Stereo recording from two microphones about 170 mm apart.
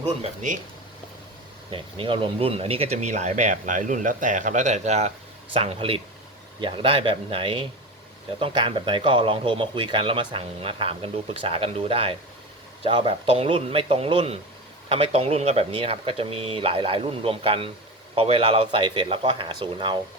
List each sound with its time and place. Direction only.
0.2 s speech: 50° right (ahead or behind)
1.7 s speech: 30° right (ahead or behind)